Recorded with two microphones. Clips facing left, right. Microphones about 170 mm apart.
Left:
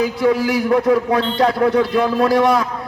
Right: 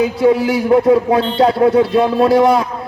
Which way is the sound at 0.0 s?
25° right (ahead or behind).